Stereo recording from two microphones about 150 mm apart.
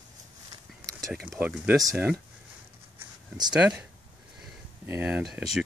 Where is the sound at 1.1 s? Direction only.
5° right (ahead or behind).